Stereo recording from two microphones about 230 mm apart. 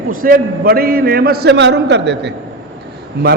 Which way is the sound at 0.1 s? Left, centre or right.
Right.